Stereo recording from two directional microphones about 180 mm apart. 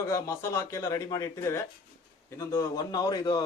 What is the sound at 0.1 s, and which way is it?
Speech, 15° left (ahead or behind).